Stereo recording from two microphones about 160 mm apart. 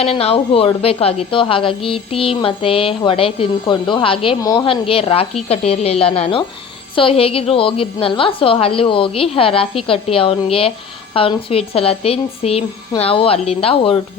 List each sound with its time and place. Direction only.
0.0 s a woman's voice: 40° left (ahead or behind)